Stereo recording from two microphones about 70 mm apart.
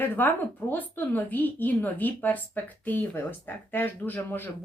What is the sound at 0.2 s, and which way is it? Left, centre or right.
Speech, left.